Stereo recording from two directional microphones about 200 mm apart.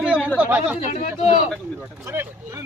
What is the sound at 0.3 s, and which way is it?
Speech, 10° right (ahead or behind).